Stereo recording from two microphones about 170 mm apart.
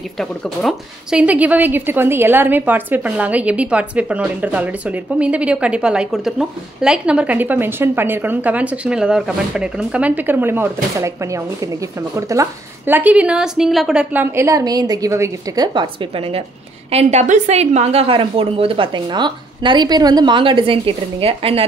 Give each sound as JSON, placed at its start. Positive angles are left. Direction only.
{"t": 0.2, "sound": "a woman's voice", "side_deg": 0}